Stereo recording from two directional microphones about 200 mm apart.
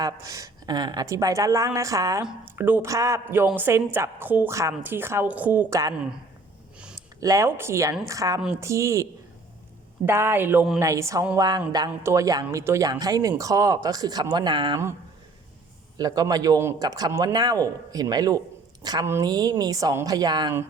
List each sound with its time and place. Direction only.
0.0 s a woman's voice: 15° right (ahead or behind)
7.2 s a woman's voice: 15° right (ahead or behind)
10.1 s a woman's voice: 10° right (ahead or behind)
16.0 s a man's voice: 20° right (ahead or behind)